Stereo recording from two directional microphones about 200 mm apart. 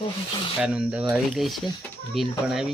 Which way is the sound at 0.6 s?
5° right (ahead or behind).